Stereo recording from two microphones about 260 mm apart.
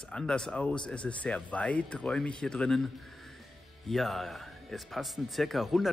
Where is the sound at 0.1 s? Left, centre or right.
Centre.